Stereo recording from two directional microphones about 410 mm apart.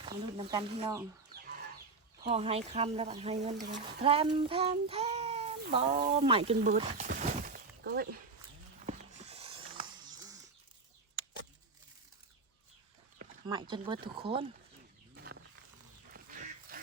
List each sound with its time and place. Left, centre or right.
0.0 s speech: centre
2.2 s speech: centre
8.9 s a sound: centre
13.1 s speech: centre
15.1 s wild animals: right
16.1 s a sound: right